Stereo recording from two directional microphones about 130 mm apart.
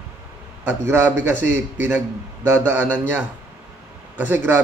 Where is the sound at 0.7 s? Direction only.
15° right (ahead or behind).